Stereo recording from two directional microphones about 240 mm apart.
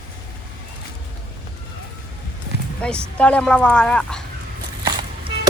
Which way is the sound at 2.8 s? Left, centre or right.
Centre.